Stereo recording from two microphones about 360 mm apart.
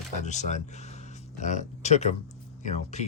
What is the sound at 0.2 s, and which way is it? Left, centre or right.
Speech, centre.